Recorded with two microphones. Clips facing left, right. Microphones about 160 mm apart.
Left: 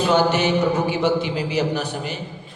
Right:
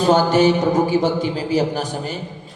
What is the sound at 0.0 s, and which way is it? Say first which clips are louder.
A man's voice: right 4 dB; 40° right (ahead or behind).